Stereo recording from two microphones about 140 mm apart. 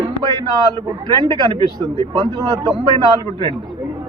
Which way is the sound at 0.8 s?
35° right (ahead or behind).